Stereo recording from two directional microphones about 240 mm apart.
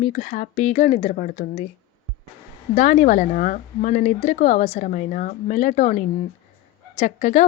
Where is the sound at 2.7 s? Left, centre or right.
Left.